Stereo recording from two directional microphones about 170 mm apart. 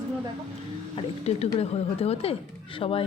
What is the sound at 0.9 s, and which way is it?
Speech, 40° left (ahead or behind).